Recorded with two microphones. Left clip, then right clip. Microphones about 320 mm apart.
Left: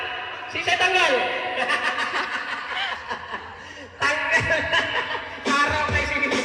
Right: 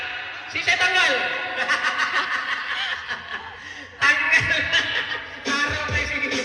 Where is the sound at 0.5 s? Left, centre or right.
Left.